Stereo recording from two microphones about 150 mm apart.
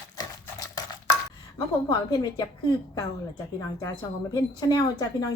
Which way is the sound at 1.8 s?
30° left (ahead or behind).